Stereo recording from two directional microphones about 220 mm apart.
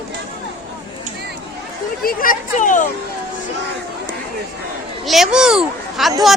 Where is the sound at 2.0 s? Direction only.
40° left (ahead or behind).